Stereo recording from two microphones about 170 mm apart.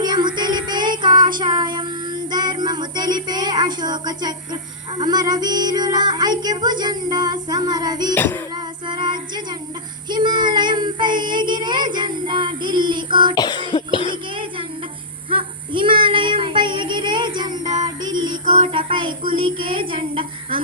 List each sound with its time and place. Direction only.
0.0 s child singing: 25° right (ahead or behind)
8.1 s child singing: 10° left (ahead or behind)
8.5 s child singing: 25° right (ahead or behind)
13.3 s cough: 25° left (ahead or behind)
15.3 s child singing: 30° right (ahead or behind)
17.8 s music: 25° right (ahead or behind)
19.3 s a sound: 30° right (ahead or behind)